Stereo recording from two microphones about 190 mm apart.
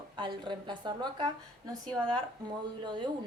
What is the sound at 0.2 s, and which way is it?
Speech, 25° right (ahead or behind).